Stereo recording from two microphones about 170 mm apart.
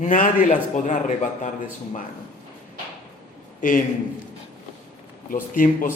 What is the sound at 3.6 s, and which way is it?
Speech, 50° left (ahead or behind).